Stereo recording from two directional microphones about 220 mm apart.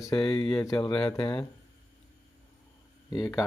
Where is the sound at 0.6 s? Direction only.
15° left (ahead or behind).